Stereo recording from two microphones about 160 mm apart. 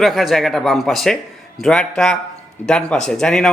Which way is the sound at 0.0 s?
Centre (ahead or behind).